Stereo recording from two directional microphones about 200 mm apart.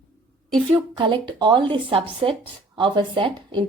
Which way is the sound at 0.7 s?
25° right (ahead or behind).